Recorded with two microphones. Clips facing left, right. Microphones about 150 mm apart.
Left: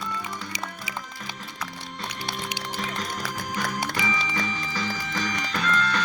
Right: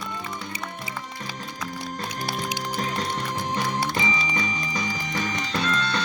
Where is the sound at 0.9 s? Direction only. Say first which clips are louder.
Right 1 dB; 90° left.